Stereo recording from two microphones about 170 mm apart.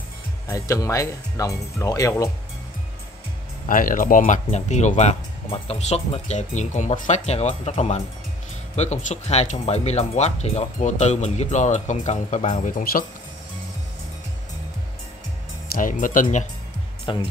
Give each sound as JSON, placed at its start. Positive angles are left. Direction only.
{"t": 0.5, "sound": "speech", "side_deg": 20}
{"t": 3.6, "sound": "speech", "side_deg": 55}
{"t": 15.7, "sound": "speech", "side_deg": 50}
{"t": 17.0, "sound": "speech", "side_deg": 35}